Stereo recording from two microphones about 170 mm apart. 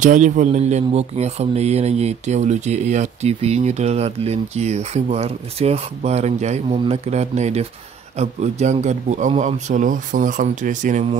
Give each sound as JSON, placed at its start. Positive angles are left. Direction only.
{"t": 0.0, "sound": "speech", "side_deg": -45}